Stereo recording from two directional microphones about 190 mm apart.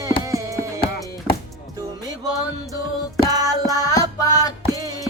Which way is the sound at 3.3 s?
20° right (ahead or behind).